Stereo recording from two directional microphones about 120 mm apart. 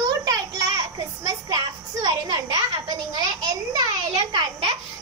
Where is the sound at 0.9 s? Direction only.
35° right (ahead or behind).